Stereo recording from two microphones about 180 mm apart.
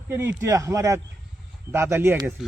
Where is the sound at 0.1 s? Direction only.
15° right (ahead or behind).